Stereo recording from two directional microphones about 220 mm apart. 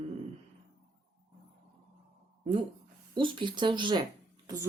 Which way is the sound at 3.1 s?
20° right (ahead or behind).